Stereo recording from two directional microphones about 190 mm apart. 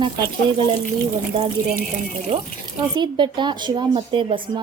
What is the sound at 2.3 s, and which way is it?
Speech, 30° right (ahead or behind).